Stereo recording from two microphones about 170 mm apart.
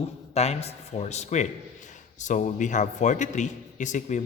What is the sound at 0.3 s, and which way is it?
A man's voice, 40° left (ahead or behind).